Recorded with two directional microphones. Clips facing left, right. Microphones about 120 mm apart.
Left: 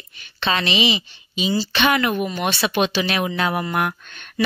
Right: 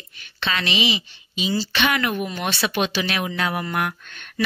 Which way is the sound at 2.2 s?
15° left (ahead or behind).